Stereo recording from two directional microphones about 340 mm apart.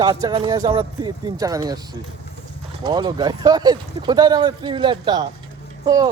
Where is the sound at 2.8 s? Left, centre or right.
Centre.